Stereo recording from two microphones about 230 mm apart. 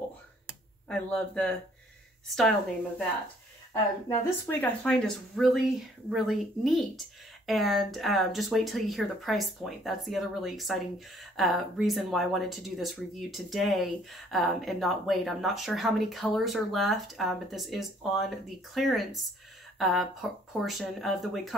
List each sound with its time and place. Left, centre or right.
0.8 s speech: centre
4.5 s speech: centre